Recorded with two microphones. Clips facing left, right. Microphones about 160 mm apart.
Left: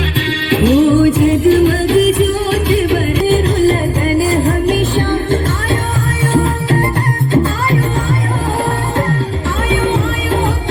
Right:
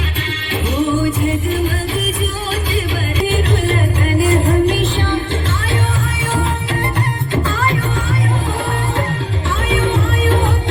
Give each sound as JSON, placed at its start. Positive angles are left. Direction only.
{"t": 0.5, "sound": "music", "side_deg": 90}
{"t": 3.2, "sound": "music", "side_deg": 40}